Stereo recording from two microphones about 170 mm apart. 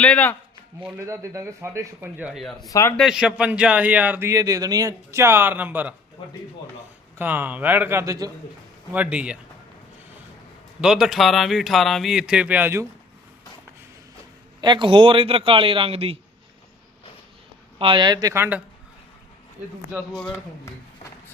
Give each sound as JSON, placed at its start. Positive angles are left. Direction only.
{"t": 0.0, "sound": "speech", "side_deg": 10}
{"t": 0.9, "sound": "speech", "side_deg": -15}
{"t": 2.6, "sound": "speech", "side_deg": 20}
{"t": 3.0, "sound": "speech", "side_deg": -5}
{"t": 7.2, "sound": "speech", "side_deg": -10}
{"t": 8.9, "sound": "speech", "side_deg": -10}
{"t": 10.8, "sound": "speech", "side_deg": -5}
{"t": 14.6, "sound": "a man's voice", "side_deg": -25}
{"t": 17.7, "sound": "speech", "side_deg": -30}
{"t": 20.1, "sound": "speech", "side_deg": 10}